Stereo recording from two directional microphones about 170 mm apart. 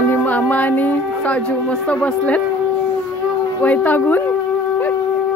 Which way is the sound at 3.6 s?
10° left (ahead or behind).